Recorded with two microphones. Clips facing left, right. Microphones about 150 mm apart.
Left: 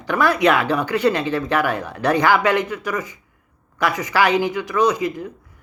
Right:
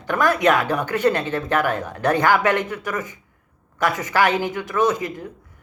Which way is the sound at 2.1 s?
15° left (ahead or behind).